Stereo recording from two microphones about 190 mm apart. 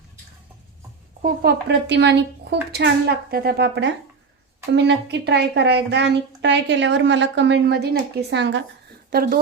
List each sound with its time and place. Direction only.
1.2 s a woman's voice: 55° right (ahead or behind)
9.0 s speech: 50° right (ahead or behind)